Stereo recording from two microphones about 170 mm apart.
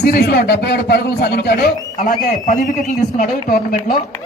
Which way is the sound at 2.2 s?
50° left (ahead or behind).